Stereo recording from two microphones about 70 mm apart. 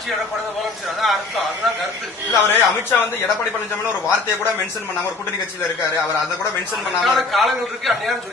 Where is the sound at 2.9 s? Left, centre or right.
Left.